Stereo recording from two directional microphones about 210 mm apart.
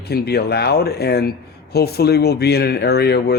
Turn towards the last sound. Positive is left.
turn(degrees=50)  # may be behind; listen again after turning